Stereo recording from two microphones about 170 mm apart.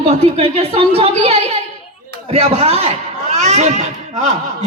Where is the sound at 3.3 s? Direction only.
40° right (ahead or behind).